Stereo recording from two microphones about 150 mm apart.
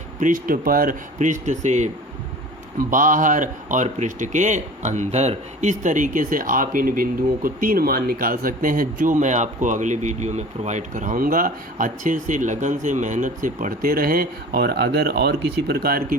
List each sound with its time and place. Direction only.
0.2 s speech: 60° right (ahead or behind)
2.7 s speech: 60° right (ahead or behind)